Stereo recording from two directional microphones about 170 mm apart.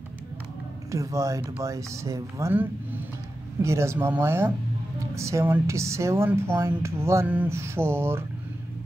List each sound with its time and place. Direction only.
0.9 s speech: 20° right (ahead or behind)